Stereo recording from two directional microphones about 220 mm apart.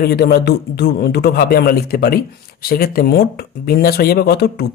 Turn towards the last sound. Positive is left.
turn(degrees=45)  # may be behind; listen again after turning